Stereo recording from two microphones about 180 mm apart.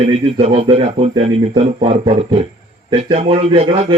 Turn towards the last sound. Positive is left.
turn(degrees=-35)  # may be behind; listen again after turning